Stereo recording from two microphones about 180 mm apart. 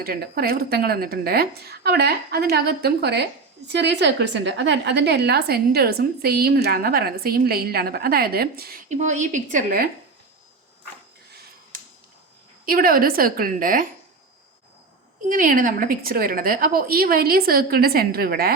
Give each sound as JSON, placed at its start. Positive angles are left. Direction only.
{"t": 0.0, "sound": "a woman's voice", "side_deg": -55}
{"t": 8.9, "sound": "a woman's voice", "side_deg": -40}
{"t": 12.6, "sound": "a woman's voice", "side_deg": -50}
{"t": 15.3, "sound": "a woman's voice", "side_deg": -50}